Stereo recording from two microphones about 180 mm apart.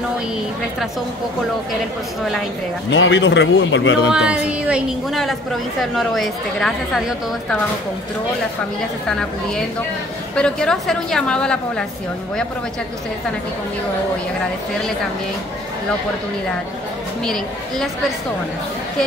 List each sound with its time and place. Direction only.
2.9 s a man's voice: 85° left
4.1 s a woman's voice: 5° right (ahead or behind)
10.3 s a woman's voice: 5° left (ahead or behind)
17.2 s speech: 5° left (ahead or behind)